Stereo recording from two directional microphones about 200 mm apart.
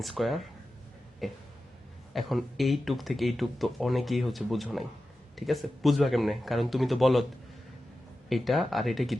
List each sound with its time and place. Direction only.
0.0 s speech: centre (ahead or behind)
8.3 s speech: centre (ahead or behind)